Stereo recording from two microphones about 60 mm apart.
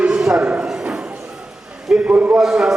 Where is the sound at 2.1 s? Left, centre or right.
Right.